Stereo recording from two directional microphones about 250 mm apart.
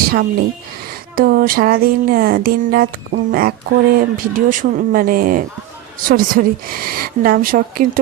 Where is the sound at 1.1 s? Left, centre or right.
Right.